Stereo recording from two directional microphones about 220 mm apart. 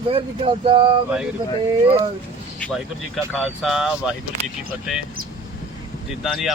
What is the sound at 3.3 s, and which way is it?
Speech, centre (ahead or behind).